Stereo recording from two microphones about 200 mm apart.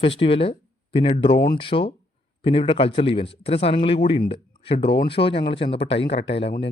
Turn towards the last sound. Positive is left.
turn(degrees=30)  # may be behind; listen again after turning